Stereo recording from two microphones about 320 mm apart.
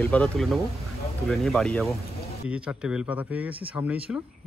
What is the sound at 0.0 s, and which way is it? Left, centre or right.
Speech, centre.